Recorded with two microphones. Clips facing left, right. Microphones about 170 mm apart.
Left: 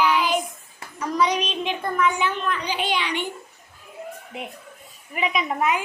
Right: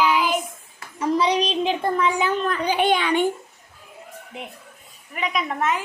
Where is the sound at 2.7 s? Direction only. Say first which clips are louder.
Right 6 dB; 50° right (ahead or behind).